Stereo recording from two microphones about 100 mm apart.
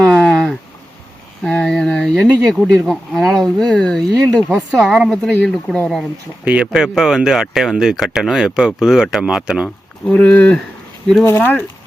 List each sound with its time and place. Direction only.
0.1 s a sound: 5° left (ahead or behind)
1.5 s speech: 5° left (ahead or behind)
6.4 s speech: 15° right (ahead or behind)
6.7 s speech: 5° right (ahead or behind)
9.6 s speech: 10° left (ahead or behind)